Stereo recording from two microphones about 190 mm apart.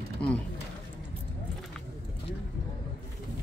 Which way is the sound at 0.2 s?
5° left (ahead or behind).